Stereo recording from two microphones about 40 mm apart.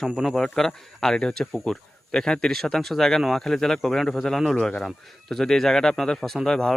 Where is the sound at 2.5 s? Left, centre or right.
Centre.